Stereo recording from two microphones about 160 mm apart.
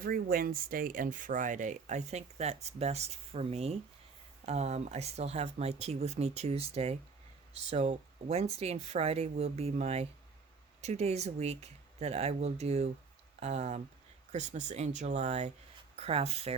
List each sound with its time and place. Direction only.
0.0 s speech: 65° right (ahead or behind); by 16.6 s 40° right (ahead or behind)